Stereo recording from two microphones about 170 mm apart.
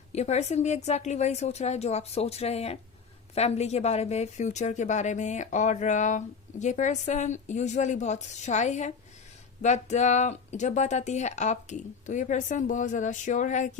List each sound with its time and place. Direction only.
0.1 s speech: 40° left (ahead or behind)